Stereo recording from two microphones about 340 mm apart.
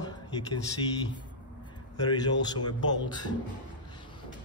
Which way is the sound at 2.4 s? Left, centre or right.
Centre.